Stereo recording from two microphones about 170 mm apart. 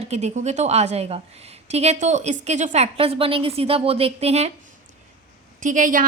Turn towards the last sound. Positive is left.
turn(degrees=-50)  # may be behind; listen again after turning